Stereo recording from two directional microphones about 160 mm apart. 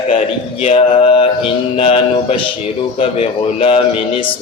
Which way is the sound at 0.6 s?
35° left (ahead or behind).